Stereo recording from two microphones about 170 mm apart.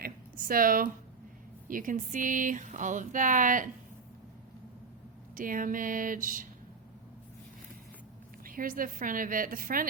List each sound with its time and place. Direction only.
0.0 s a sound: 55° right (ahead or behind)
1.6 s speech: 55° right (ahead or behind)
5.3 s speech: 55° right (ahead or behind)
8.4 s a woman's voice: 55° right (ahead or behind)